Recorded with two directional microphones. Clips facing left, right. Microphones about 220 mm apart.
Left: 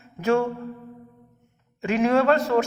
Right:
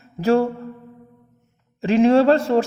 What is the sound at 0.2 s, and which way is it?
Speech, 35° right (ahead or behind).